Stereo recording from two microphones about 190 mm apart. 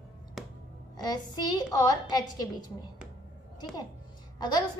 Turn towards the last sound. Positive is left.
turn(degrees=20)  # may be behind; listen again after turning